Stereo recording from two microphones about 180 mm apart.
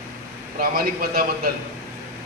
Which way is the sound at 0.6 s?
55° right (ahead or behind).